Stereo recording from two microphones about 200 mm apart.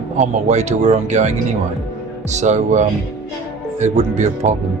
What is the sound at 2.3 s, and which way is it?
Speech, 35° right (ahead or behind).